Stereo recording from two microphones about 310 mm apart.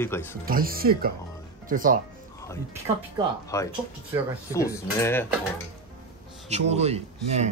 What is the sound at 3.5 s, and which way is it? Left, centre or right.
Speech, centre.